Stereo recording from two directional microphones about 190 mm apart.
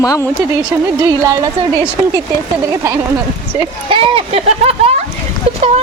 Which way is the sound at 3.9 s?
30° right (ahead or behind).